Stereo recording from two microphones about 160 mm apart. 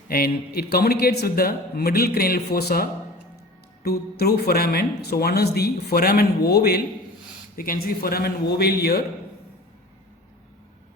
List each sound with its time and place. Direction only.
0.1 s speech: 70° left (ahead or behind)
3.8 s speech: 80° left
7.5 s speech: 65° left (ahead or behind); by 9.0 s 85° left